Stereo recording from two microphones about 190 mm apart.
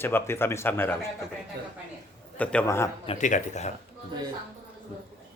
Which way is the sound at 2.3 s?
5° left (ahead or behind).